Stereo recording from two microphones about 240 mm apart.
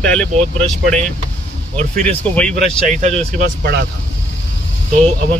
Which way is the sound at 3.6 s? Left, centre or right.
Right.